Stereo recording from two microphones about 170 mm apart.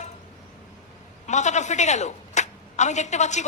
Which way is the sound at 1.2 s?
45° left (ahead or behind).